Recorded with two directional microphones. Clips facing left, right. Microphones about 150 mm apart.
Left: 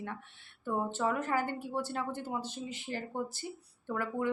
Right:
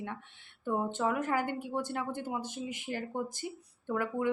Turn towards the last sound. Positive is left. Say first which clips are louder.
# right 2 dB
turn(degrees=-15)  # may be behind; listen again after turning